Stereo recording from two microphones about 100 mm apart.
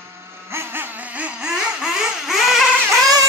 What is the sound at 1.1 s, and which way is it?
Vehicle, 10° right (ahead or behind).